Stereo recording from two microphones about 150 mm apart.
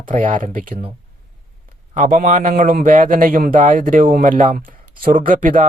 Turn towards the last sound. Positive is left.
turn(degrees=-65)  # may be behind; listen again after turning